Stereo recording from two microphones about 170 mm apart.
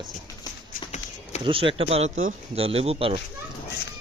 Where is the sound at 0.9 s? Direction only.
40° left (ahead or behind).